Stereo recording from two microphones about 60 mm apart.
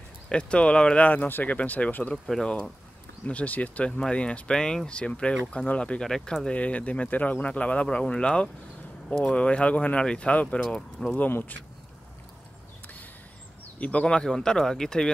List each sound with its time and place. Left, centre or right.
0.3 s speech: centre
2.2 s speech: centre
3.3 s speech: left
6.0 s speech: centre
11.1 s speech: left
12.8 s a sound: left
13.7 s speech: left